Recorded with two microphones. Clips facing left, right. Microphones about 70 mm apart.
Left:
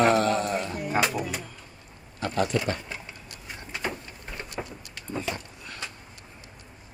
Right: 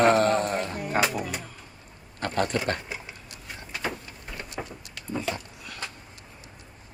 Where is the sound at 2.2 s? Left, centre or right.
Right.